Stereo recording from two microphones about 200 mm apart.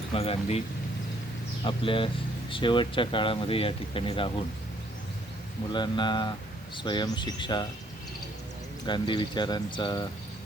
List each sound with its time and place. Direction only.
0.1 s speech: 30° left (ahead or behind)
1.6 s speech: 25° left (ahead or behind)
5.7 s speech: 25° left (ahead or behind)
8.9 s speech: 20° left (ahead or behind)